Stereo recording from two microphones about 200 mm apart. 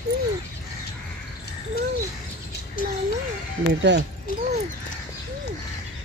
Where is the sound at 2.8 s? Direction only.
45° left (ahead or behind).